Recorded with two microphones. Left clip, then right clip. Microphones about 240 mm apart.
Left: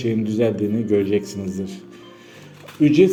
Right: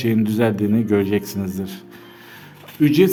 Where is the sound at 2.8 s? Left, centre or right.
Right.